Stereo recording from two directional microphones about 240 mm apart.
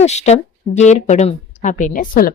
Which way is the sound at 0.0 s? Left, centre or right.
Left.